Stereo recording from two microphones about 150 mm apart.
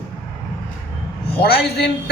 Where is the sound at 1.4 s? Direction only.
90° left.